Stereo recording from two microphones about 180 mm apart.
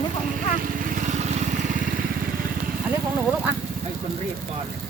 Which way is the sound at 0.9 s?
45° right (ahead or behind).